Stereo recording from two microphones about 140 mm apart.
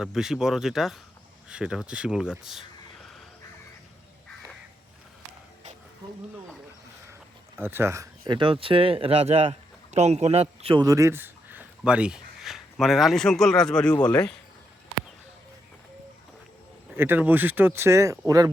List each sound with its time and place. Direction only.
0.0 s speech: 5° right (ahead or behind)
7.1 s a sound: 15° right (ahead or behind)
8.3 s speech: 40° right (ahead or behind)
10.8 s speech: 20° right (ahead or behind); by 14.3 s 10° left (ahead or behind)
16.9 s speech: 15° right (ahead or behind)